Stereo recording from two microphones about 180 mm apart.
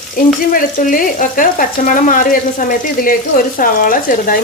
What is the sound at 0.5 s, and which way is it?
Speech, 50° left (ahead or behind).